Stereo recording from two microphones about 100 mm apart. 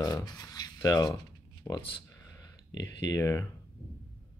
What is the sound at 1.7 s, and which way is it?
Speech, 20° left (ahead or behind).